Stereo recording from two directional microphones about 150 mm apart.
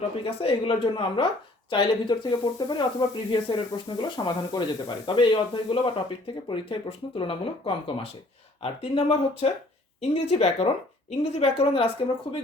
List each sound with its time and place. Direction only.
0.3 s speech: 35° left (ahead or behind)